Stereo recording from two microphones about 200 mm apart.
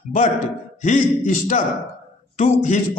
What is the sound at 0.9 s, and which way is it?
A man's voice, 40° left (ahead or behind).